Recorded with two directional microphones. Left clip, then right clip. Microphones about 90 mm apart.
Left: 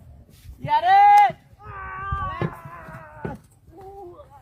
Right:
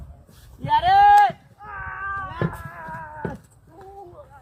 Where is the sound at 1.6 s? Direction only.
30° left (ahead or behind).